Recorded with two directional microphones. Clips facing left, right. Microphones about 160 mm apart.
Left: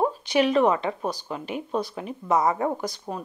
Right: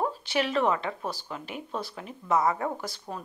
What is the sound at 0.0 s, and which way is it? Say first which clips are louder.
Speech: left 6 dB; 15° left (ahead or behind).